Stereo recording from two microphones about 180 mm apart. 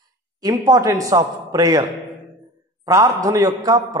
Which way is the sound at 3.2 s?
20° right (ahead or behind).